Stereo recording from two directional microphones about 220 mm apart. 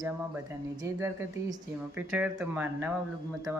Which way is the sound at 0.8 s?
15° right (ahead or behind).